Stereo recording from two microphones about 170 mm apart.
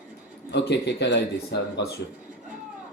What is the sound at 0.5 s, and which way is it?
Speech, 90° left.